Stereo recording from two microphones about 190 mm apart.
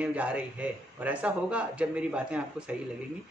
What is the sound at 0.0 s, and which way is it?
A man's voice, 5° right (ahead or behind).